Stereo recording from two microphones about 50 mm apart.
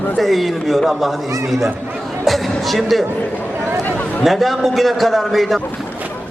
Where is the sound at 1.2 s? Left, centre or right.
Right.